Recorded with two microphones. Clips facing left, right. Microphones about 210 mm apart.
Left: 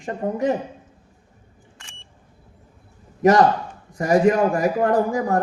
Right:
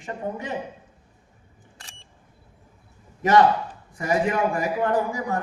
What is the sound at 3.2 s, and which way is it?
A man's voice, 40° left (ahead or behind).